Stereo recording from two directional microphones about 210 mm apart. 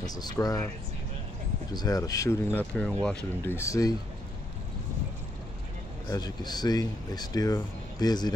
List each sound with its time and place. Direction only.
0.0 s speech: 20° left (ahead or behind)
1.7 s speech: 20° left (ahead or behind)
2.8 s speech: 5° left (ahead or behind)
6.0 s speech: 20° left (ahead or behind)